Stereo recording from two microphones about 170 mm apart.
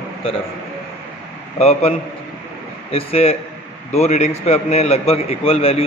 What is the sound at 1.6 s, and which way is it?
A man's voice, 35° left (ahead or behind).